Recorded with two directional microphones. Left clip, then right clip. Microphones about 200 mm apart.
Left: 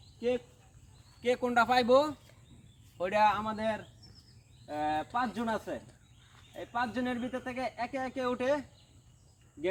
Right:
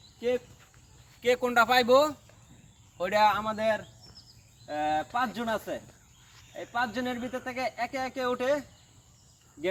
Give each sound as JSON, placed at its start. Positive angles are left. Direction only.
{"t": 0.2, "sound": "speech", "side_deg": -10}
{"t": 9.6, "sound": "cricket", "side_deg": -5}